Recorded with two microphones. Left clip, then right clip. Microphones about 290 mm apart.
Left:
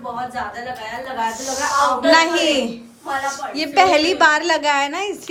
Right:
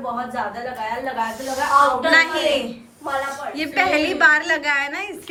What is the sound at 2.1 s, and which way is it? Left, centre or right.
A woman's voice, centre.